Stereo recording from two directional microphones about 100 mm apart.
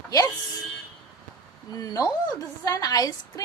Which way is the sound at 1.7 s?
40° left (ahead or behind).